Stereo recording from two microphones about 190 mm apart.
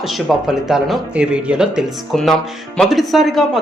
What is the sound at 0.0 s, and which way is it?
Speech, centre (ahead or behind).